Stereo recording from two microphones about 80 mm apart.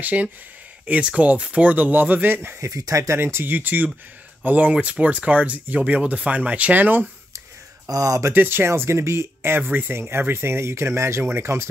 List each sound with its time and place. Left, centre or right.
0.0 s speech: centre
2.6 s speech: right
7.9 s speech: right
8.3 s speech: right